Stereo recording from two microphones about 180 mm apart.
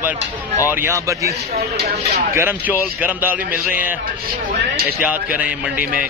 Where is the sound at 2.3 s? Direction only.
10° right (ahead or behind).